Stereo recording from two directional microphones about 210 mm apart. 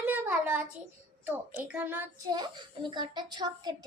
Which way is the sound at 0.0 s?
10° right (ahead or behind).